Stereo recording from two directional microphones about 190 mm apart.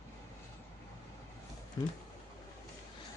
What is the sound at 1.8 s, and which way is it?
Speech, 20° left (ahead or behind).